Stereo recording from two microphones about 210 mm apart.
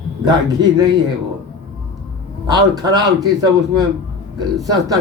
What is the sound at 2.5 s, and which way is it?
Speech, 20° right (ahead or behind).